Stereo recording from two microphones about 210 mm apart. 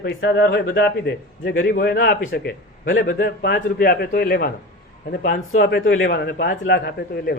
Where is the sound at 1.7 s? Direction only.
45° left (ahead or behind).